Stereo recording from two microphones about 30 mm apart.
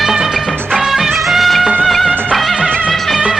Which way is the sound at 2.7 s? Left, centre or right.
Left.